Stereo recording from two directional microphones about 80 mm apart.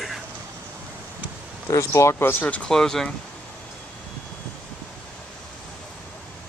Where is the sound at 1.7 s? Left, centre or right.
Left; by 2.7 s centre.